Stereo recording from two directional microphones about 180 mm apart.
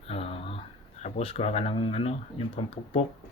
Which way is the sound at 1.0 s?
35° left (ahead or behind).